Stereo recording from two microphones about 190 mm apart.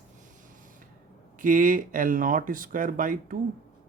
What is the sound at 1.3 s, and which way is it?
Speech, 45° right (ahead or behind).